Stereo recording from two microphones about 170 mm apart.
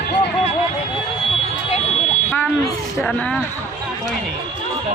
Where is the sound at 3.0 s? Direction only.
5° left (ahead or behind).